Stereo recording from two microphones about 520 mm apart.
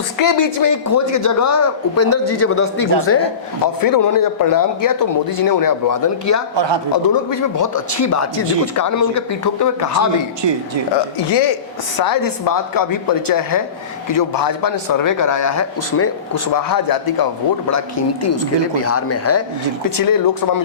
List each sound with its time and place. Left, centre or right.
0.2 s a man's voice: left
3.6 s a man's voice: left
11.2 s a man's voice: left
17.7 s speech: left
20.0 s a man's voice: left